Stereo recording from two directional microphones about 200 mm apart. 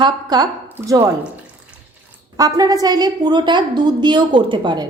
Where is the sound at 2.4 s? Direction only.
20° right (ahead or behind).